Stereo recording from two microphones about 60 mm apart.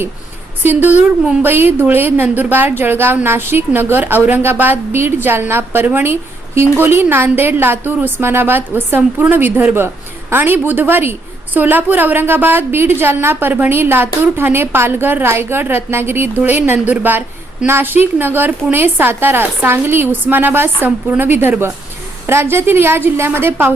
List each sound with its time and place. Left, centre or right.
0.6 s a woman's voice: right
9.0 s a woman's voice: centre
9.3 s a woman's voice: right